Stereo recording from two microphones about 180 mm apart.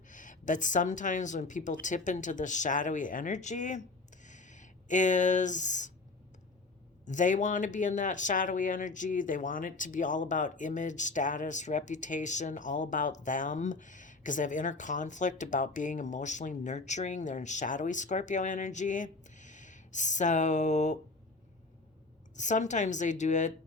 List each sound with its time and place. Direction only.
0.1 s a woman's voice: 45° left (ahead or behind)
7.0 s speech: 45° left (ahead or behind)
22.4 s speech: 40° left (ahead or behind)